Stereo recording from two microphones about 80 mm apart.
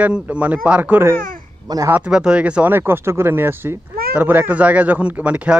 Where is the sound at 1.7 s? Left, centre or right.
Right.